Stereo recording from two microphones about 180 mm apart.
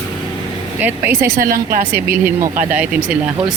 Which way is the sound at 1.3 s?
50° right (ahead or behind).